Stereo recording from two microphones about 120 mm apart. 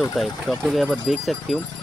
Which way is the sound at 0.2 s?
Centre (ahead or behind).